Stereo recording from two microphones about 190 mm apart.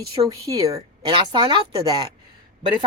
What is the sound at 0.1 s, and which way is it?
Speech, 20° right (ahead or behind).